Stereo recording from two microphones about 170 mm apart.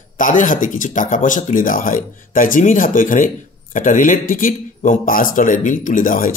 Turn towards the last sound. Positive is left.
turn(degrees=55)  # may be behind; listen again after turning